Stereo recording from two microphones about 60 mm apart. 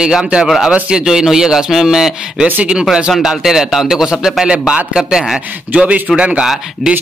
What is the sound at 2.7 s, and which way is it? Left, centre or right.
A man's voice, centre.